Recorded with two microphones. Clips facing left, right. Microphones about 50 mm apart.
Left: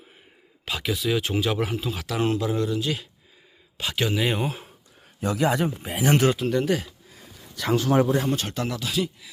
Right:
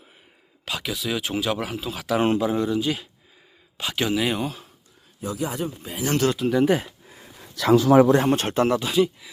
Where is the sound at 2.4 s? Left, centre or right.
Centre.